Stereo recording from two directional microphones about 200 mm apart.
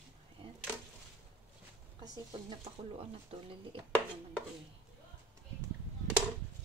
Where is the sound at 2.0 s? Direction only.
20° right (ahead or behind).